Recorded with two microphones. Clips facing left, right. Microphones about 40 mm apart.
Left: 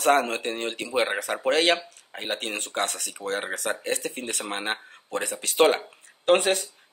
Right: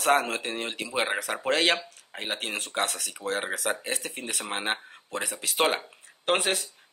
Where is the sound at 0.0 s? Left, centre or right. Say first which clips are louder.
Left 2 dB; centre.